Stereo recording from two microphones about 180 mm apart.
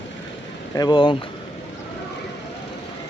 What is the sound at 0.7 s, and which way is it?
Speech, 25° left (ahead or behind).